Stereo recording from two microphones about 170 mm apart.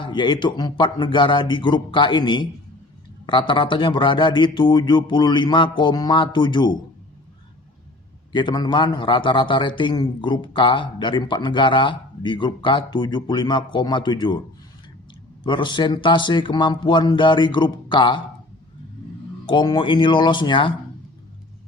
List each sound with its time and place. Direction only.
0.0 s a man's voice: 25° left (ahead or behind)
8.3 s a man's voice: 25° left (ahead or behind)
15.4 s a man's voice: 30° left (ahead or behind)
19.5 s a man's voice: 25° left (ahead or behind)